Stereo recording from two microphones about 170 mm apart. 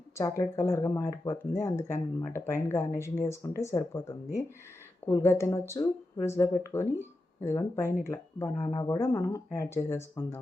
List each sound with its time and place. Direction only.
0.2 s speech: 15° left (ahead or behind)